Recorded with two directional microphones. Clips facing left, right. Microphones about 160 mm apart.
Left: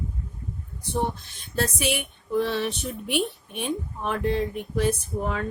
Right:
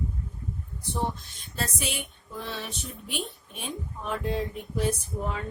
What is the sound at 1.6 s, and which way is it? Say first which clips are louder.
Speech: left 7 dB; 70° left (ahead or behind).